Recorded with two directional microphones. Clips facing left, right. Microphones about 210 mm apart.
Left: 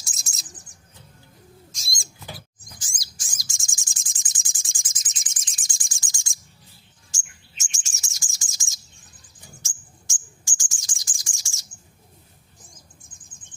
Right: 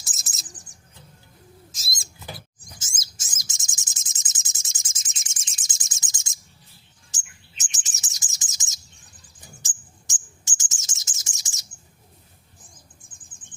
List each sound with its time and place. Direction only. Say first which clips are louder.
0.0 s bird: even; centre (ahead or behind)
1.7 s bird: even; 5° right (ahead or behind)
2.7 s bird: even; 25° right (ahead or behind)
7.6 s chirp: even; 20° right (ahead or behind)
9.6 s bird: even; 20° right (ahead or behind)